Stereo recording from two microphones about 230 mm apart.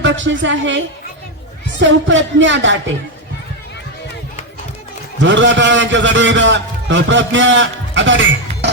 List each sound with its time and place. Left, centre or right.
0.0 s a man's voice: right
1.8 s a man's voice: right
5.2 s a man's voice: right